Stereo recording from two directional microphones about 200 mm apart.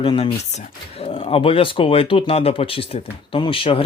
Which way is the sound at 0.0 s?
25° left (ahead or behind).